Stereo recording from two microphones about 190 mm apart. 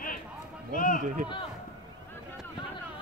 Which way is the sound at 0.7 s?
45° left (ahead or behind).